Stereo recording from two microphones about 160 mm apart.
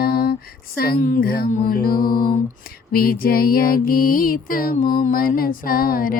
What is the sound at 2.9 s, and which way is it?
Mantra, 65° left (ahead or behind).